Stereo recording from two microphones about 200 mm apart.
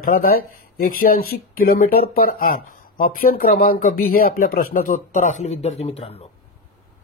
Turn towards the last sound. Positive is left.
turn(degrees=30)  # may be behind; listen again after turning